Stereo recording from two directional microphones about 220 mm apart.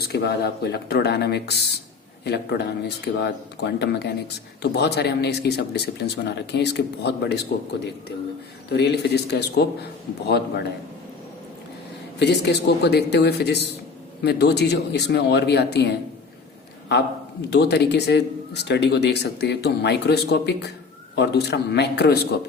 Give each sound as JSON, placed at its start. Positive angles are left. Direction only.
{"t": 0.0, "sound": "speech", "side_deg": 45}
{"t": 8.7, "sound": "speech", "side_deg": 50}
{"t": 12.2, "sound": "speech", "side_deg": 50}
{"t": 17.5, "sound": "speech", "side_deg": 50}